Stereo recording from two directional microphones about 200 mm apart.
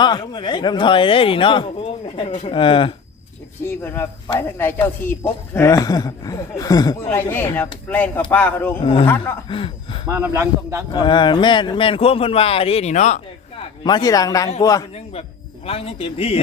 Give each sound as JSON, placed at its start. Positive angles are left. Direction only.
{"t": 0.0, "sound": "speech", "side_deg": 20}
{"t": 3.6, "sound": "a woman's voice", "side_deg": 10}
{"t": 8.8, "sound": "speech", "side_deg": 30}
{"t": 9.0, "sound": "a woman's voice", "side_deg": 10}
{"t": 9.5, "sound": "speech", "side_deg": 25}
{"t": 10.1, "sound": "a man's voice", "side_deg": -10}
{"t": 10.9, "sound": "speech", "side_deg": 25}
{"t": 13.8, "sound": "a woman's voice", "side_deg": 20}
{"t": 15.6, "sound": "speech", "side_deg": 30}